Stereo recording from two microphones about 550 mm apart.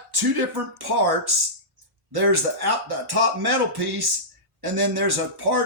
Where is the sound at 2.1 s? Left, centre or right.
Right.